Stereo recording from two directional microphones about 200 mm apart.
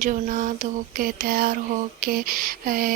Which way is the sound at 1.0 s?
45° right (ahead or behind).